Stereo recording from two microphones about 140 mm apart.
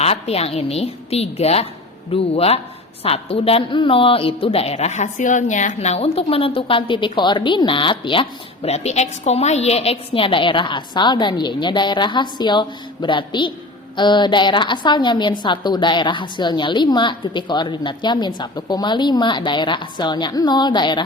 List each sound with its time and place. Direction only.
0.0 s a woman's voice: 45° left (ahead or behind)